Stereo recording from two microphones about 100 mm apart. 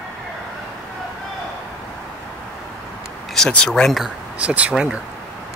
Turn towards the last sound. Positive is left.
turn(degrees=-10)  # may be behind; listen again after turning